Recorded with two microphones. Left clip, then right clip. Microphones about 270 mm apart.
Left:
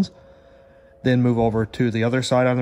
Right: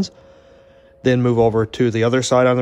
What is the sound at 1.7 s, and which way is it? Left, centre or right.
Speech, right.